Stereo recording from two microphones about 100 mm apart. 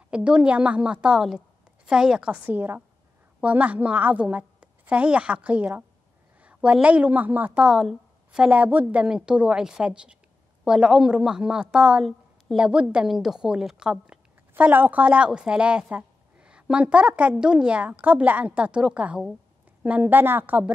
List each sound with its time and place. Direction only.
0.1 s a woman's voice: 10° right (ahead or behind)
7.6 s a woman's voice: 5° right (ahead or behind)
14.5 s a woman's voice: 20° right (ahead or behind)